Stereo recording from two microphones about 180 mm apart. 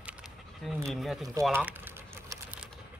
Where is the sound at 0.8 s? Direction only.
Centre (ahead or behind).